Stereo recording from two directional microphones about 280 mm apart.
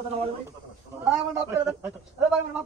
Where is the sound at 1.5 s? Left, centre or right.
Centre.